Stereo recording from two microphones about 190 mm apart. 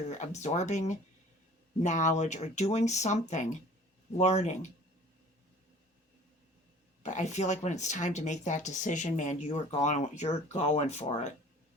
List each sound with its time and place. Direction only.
0.1 s speech: 40° left (ahead or behind)
7.0 s speech: 35° left (ahead or behind)